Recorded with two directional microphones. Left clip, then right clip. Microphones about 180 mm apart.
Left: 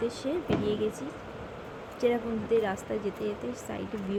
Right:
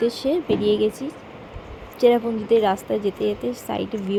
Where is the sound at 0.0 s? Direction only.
30° right (ahead or behind).